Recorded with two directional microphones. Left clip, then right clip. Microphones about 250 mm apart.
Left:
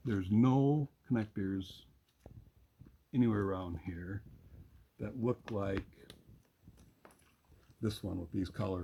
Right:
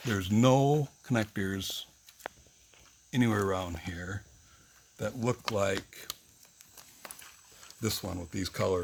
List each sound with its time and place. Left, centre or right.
0.1 s speech: right
3.1 s speech: right
7.8 s speech: right